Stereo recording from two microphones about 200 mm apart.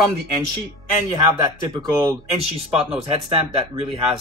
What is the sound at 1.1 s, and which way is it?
A man's voice, 20° right (ahead or behind).